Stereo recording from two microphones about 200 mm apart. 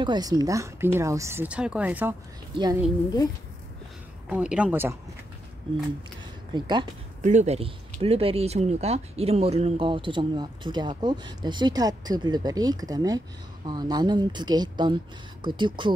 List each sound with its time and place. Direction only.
0.0 s speech: 20° right (ahead or behind)
2.5 s speech: 20° right (ahead or behind)
4.3 s speech: 5° right (ahead or behind)
6.5 s speech: 20° right (ahead or behind)
7.2 s speech: 35° right (ahead or behind)